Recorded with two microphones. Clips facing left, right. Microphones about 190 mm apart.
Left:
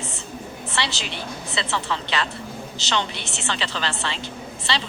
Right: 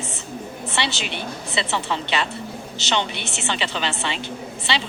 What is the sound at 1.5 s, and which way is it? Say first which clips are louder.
Speech: right 2 dB; 25° right (ahead or behind).